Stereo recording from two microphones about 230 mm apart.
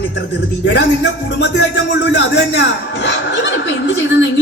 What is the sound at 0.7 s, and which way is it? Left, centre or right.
Speech, left.